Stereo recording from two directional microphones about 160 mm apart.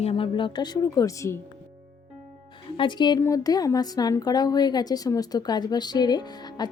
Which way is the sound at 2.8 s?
30° left (ahead or behind).